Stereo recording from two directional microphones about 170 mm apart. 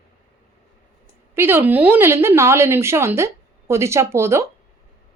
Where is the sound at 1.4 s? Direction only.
15° right (ahead or behind).